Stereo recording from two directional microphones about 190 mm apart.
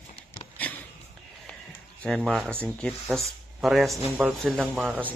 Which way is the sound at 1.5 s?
5° left (ahead or behind).